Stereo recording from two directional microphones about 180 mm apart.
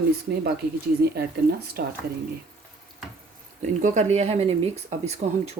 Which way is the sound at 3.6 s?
40° right (ahead or behind).